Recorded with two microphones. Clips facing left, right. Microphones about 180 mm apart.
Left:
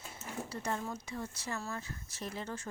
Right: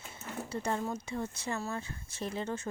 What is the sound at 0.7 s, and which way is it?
Speech, 30° right (ahead or behind).